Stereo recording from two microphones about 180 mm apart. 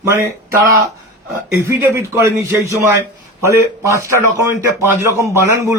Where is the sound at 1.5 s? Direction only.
15° right (ahead or behind).